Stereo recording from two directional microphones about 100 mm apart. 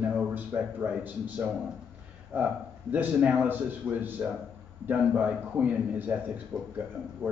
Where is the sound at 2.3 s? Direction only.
15° right (ahead or behind).